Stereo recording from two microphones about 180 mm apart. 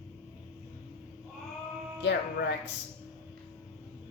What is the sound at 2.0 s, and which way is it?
Speech, 70° left (ahead or behind).